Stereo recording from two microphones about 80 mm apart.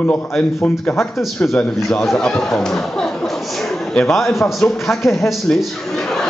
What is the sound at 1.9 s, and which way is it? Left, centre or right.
A man's voice, centre.